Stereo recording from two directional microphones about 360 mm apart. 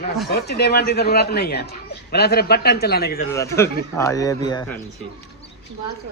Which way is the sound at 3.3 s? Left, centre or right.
Centre.